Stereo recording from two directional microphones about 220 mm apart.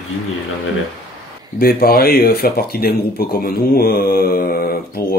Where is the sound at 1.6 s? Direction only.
45° left (ahead or behind).